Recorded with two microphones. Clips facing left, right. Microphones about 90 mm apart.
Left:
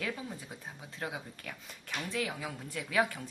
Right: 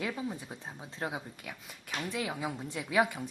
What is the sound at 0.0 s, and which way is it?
A woman's voice, 15° right (ahead or behind).